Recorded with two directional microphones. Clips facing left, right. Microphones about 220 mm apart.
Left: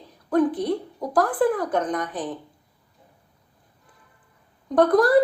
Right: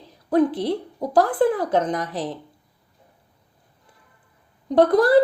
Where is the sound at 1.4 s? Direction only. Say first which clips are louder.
Right 2 dB; 25° right (ahead or behind).